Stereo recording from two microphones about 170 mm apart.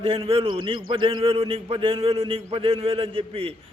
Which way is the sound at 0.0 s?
35° right (ahead or behind).